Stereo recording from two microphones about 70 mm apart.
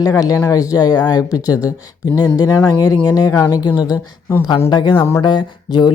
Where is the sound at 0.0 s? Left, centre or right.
Left.